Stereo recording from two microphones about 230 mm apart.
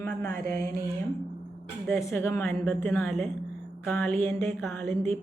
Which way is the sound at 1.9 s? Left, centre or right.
Centre.